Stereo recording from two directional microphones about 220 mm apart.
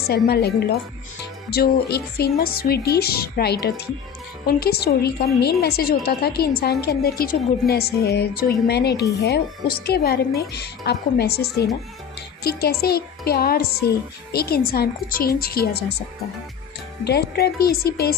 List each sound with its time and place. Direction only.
0.1 s a woman's voice: 45° left (ahead or behind)